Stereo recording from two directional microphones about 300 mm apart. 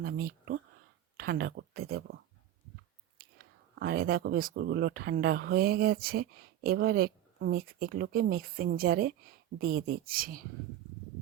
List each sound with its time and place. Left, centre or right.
0.0 s speech: right
3.8 s speech: right